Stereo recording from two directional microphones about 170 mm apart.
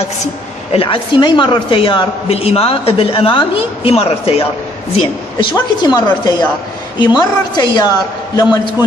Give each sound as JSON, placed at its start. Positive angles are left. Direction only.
{"t": 0.7, "sound": "a woman's voice", "side_deg": 30}